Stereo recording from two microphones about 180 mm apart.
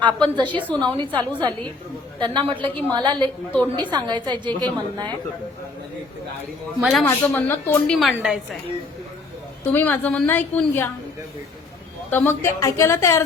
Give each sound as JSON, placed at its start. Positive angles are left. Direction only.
{"t": 0.0, "sound": "a woman's voice", "side_deg": -25}
{"t": 6.8, "sound": "a woman's voice", "side_deg": 5}
{"t": 7.9, "sound": "a woman's voice", "side_deg": 0}
{"t": 9.6, "sound": "a woman's voice", "side_deg": 10}
{"t": 12.1, "sound": "a woman's voice", "side_deg": 10}